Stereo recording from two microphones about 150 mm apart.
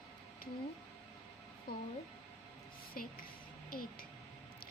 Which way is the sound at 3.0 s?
75° left (ahead or behind).